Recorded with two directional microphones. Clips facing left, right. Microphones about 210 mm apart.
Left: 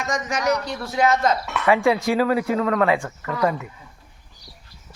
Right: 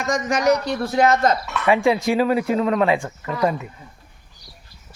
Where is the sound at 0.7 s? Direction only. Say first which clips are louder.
Right 3 dB; 45° right (ahead or behind).